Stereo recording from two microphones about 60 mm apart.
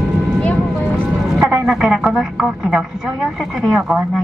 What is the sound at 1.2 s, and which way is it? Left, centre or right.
Speech, centre.